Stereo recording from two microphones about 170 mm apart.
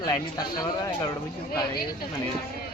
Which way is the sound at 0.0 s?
20° left (ahead or behind).